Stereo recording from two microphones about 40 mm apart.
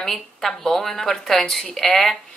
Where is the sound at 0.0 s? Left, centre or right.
Centre.